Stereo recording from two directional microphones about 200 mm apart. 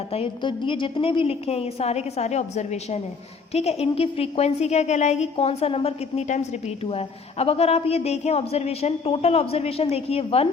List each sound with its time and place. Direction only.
0.1 s a woman's voice: 25° left (ahead or behind)